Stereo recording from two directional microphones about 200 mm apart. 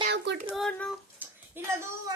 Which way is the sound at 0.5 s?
5° left (ahead or behind).